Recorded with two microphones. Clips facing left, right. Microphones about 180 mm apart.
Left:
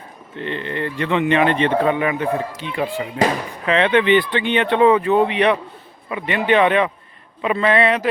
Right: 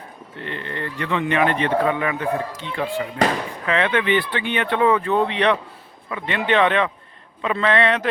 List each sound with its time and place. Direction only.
0.3 s speech: 25° left (ahead or behind); by 8.0 s 5° left (ahead or behind)